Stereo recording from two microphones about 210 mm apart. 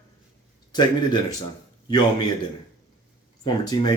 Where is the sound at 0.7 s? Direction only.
20° left (ahead or behind).